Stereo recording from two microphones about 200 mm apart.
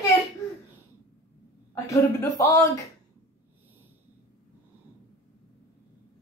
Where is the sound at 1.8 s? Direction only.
15° left (ahead or behind).